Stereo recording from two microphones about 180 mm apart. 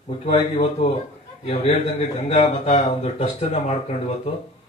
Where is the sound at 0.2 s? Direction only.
35° left (ahead or behind).